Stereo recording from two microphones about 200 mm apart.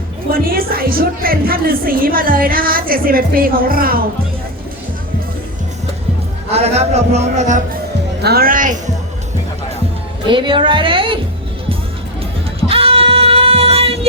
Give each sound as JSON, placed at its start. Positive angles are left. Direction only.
{"t": 0.5, "sound": "a woman's voice", "side_deg": -45}
{"t": 6.5, "sound": "a man's voice", "side_deg": -35}
{"t": 8.2, "sound": "a woman's voice", "side_deg": -50}
{"t": 10.2, "sound": "a woman's voice", "side_deg": -25}
{"t": 12.6, "sound": "child singing", "side_deg": -30}